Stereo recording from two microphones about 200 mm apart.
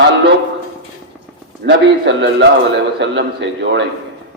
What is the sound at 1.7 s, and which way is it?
A man's voice, 60° right (ahead or behind).